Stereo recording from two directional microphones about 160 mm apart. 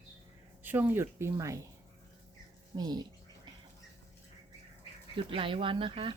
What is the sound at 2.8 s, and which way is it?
Speech, 25° right (ahead or behind).